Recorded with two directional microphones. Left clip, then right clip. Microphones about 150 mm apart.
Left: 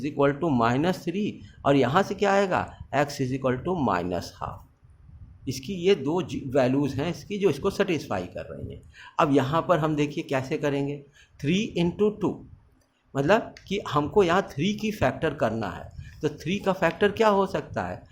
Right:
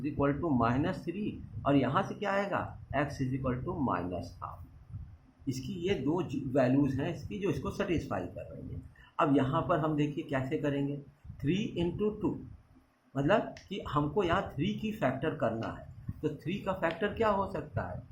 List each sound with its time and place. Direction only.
0.0 s speech: 75° left (ahead or behind)
5.5 s speech: 70° left (ahead or behind); by 10.8 s 90° left
11.4 s speech: 75° left (ahead or behind)
16.2 s speech: 75° left (ahead or behind)
17.0 s speech: 90° left